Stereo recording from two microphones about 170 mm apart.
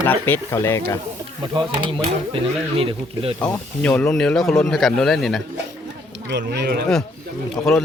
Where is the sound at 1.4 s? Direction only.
25° right (ahead or behind).